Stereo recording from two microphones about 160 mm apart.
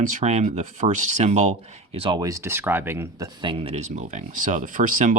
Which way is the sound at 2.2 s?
20° right (ahead or behind).